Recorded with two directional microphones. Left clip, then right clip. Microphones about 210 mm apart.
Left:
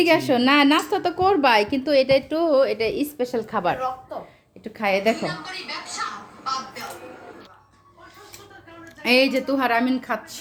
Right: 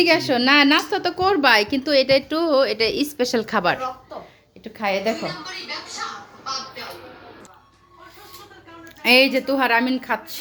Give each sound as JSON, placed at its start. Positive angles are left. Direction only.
{"t": 0.0, "sound": "a woman's voice", "side_deg": 0}
{"t": 4.6, "sound": "a woman's voice", "side_deg": 5}
{"t": 9.0, "sound": "a woman's voice", "side_deg": -5}